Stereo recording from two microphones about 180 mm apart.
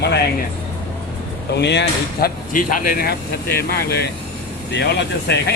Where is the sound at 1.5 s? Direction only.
70° left (ahead or behind).